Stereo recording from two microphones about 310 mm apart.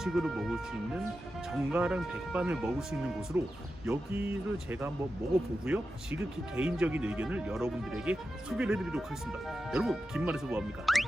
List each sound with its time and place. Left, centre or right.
0.0 s speech: centre